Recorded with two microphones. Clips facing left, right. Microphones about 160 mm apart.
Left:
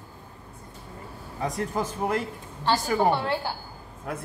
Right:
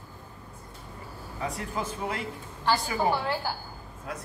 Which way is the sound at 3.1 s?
25° left (ahead or behind).